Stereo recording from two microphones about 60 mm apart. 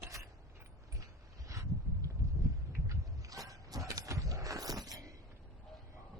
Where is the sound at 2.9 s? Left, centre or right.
Right.